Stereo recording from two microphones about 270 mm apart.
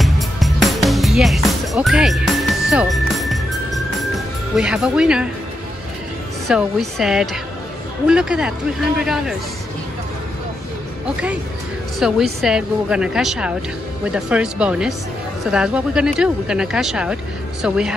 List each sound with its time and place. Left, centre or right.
0.0 s music: centre
6.4 s speech: centre
12.0 s speech: centre